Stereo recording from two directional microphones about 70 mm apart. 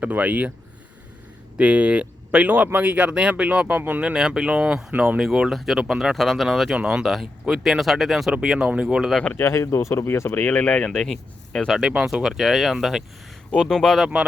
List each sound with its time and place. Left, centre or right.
0.0 s speech: right
1.5 s speech: centre
4.1 s speech: centre
9.4 s speech: left
10.3 s speech: left; by 11.8 s centre
11.8 s speech: centre
13.6 s speech: centre